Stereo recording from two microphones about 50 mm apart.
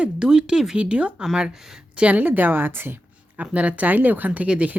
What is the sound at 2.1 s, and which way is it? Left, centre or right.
Speech, right.